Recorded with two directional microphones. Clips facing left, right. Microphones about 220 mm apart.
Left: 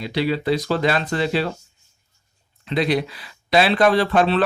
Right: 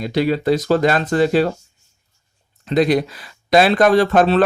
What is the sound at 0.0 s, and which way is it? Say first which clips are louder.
Speech: right 4 dB; 45° right (ahead or behind).